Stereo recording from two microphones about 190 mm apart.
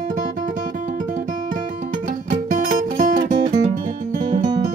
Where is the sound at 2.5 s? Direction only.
45° right (ahead or behind).